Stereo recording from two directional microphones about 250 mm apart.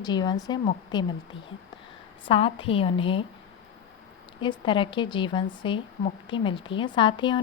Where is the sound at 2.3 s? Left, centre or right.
Left.